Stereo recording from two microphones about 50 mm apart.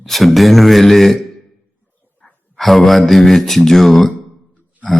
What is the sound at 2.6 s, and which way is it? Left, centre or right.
Speech, centre.